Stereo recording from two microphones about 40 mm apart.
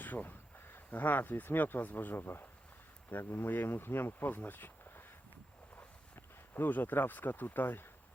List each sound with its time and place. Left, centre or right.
0.0 s speech: left
2.1 s speech: left
3.1 s speech: left